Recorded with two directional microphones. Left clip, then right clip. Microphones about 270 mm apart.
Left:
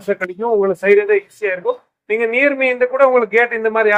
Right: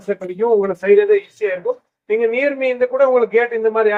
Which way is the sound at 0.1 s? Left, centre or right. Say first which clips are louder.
Right 1 dB; left.